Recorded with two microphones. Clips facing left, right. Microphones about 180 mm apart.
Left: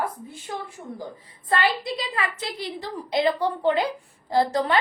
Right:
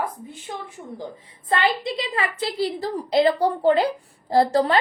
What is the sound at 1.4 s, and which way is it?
A woman's voice, 25° right (ahead or behind).